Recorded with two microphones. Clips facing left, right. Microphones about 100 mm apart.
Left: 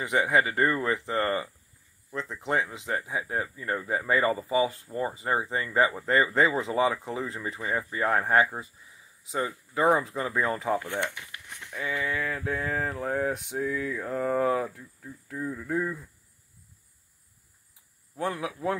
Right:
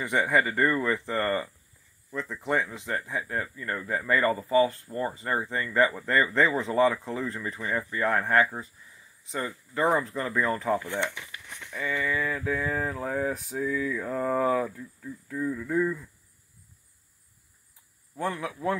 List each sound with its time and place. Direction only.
0.1 s speech: 5° left (ahead or behind)
3.0 s speech: 15° left (ahead or behind)
9.3 s speech: 5° left (ahead or behind)
15.2 s speech: 15° left (ahead or behind)
18.1 s speech: 5° left (ahead or behind)